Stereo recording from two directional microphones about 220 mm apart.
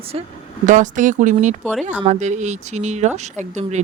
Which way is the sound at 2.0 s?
30° right (ahead or behind).